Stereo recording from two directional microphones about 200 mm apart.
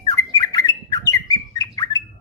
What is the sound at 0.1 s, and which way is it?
Bird, 15° left (ahead or behind).